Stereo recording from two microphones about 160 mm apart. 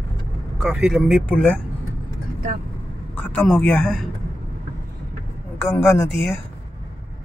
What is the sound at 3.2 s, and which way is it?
Speech, 10° left (ahead or behind).